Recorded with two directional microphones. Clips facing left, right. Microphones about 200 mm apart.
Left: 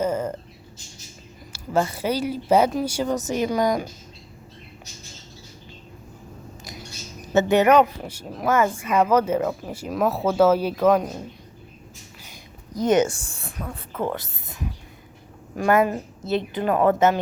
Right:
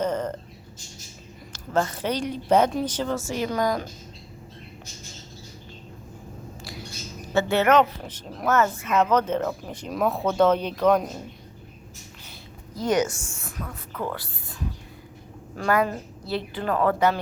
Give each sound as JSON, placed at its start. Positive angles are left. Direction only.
{"t": 0.0, "sound": "a sound", "side_deg": 10}
{"t": 1.5, "sound": "speech", "side_deg": 10}
{"t": 7.3, "sound": "speech", "side_deg": 15}
{"t": 12.7, "sound": "a woman's voice", "side_deg": 20}